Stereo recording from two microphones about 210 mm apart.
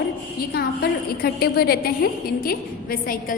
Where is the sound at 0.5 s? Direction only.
45° left (ahead or behind).